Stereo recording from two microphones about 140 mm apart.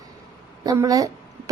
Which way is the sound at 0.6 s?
25° right (ahead or behind).